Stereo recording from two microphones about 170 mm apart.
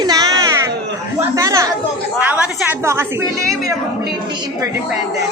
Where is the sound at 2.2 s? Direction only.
10° right (ahead or behind).